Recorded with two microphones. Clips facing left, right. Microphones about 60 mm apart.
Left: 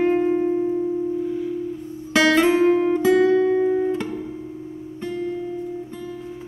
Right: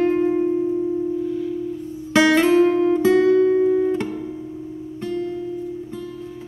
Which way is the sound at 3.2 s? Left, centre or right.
Left.